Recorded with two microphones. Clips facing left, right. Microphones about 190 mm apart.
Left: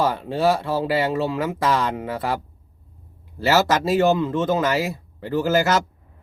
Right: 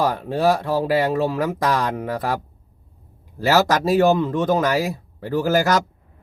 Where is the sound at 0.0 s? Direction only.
15° right (ahead or behind).